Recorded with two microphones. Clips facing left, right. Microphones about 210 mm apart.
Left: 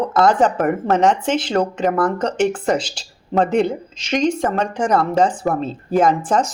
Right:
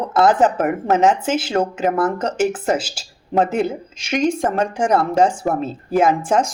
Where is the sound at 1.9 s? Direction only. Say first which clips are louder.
Even; 25° right (ahead or behind).